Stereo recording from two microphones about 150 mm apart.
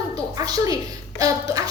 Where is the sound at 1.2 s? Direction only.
25° right (ahead or behind).